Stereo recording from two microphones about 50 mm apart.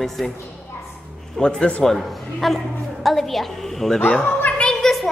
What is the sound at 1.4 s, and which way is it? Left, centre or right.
Speech, centre.